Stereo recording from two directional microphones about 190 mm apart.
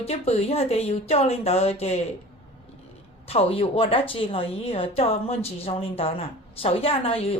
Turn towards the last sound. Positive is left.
turn(degrees=30)  # may be behind; listen again after turning